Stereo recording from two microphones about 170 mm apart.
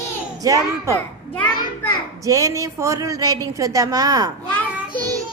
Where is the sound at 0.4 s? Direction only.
20° right (ahead or behind).